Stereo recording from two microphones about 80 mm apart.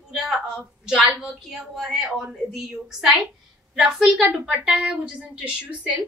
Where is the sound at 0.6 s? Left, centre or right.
Centre.